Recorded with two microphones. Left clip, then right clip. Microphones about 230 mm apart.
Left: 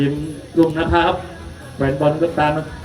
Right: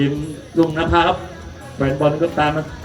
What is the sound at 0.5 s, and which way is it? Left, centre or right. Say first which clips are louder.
Speech: even; right.